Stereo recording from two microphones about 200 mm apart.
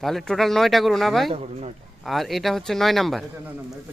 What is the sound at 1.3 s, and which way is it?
Speech, 30° right (ahead or behind).